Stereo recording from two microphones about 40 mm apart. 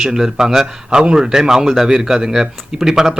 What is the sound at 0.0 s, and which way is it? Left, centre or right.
A man's voice, centre.